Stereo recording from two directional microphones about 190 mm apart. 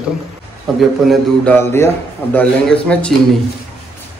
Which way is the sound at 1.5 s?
10° left (ahead or behind).